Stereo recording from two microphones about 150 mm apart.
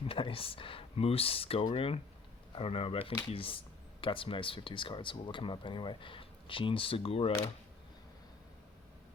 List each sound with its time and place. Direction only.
0.1 s speech: 35° left (ahead or behind)